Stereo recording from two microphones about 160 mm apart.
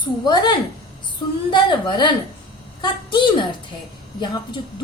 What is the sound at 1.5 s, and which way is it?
A woman's voice, 30° left (ahead or behind).